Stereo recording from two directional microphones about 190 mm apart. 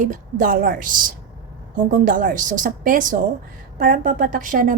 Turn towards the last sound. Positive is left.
turn(degrees=-45)  # may be behind; listen again after turning